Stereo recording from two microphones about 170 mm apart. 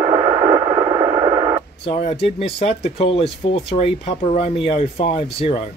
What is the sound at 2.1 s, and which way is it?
Speech, 35° left (ahead or behind).